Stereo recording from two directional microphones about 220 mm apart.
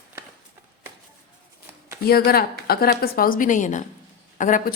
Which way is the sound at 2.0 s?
45° left (ahead or behind).